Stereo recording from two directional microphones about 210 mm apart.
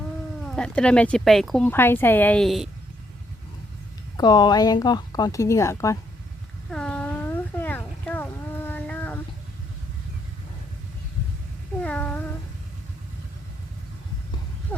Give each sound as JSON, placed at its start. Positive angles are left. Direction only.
{"t": 0.4, "sound": "speech", "side_deg": 5}
{"t": 4.2, "sound": "a woman's voice", "side_deg": 20}
{"t": 6.7, "sound": "a sound", "side_deg": 5}
{"t": 11.8, "sound": "cat", "side_deg": 5}